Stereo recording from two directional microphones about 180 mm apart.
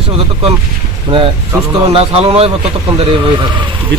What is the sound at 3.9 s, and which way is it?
Speech, 75° right (ahead or behind).